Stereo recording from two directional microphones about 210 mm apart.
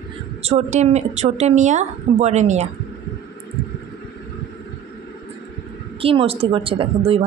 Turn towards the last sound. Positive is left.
turn(degrees=-25)  # may be behind; listen again after turning